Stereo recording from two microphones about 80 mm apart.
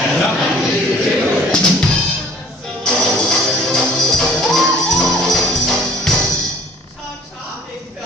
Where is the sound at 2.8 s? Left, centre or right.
Centre.